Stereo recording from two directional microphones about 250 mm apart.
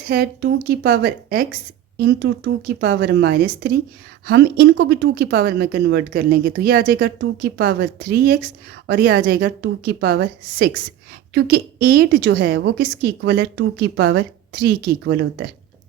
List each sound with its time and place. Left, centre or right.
0.0 s a woman's voice: right